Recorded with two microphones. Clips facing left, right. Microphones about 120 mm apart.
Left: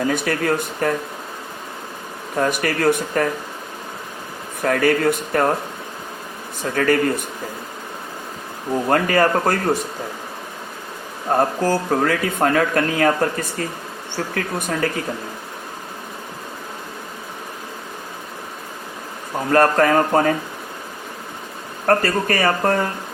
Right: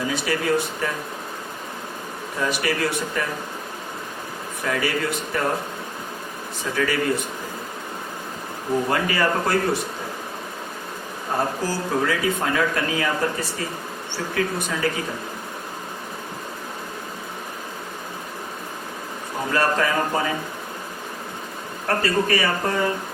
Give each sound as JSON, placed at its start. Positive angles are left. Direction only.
{"t": 0.1, "sound": "speech", "side_deg": 55}
{"t": 2.4, "sound": "speech", "side_deg": 50}
{"t": 4.6, "sound": "speech", "side_deg": 50}
{"t": 6.7, "sound": "speech", "side_deg": 50}
{"t": 8.9, "sound": "speech", "side_deg": 50}
{"t": 11.3, "sound": "speech", "side_deg": 55}
{"t": 19.5, "sound": "speech", "side_deg": 50}
{"t": 21.8, "sound": "speech", "side_deg": 45}